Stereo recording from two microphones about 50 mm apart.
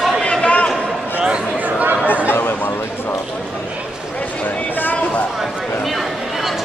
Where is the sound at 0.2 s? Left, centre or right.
Left.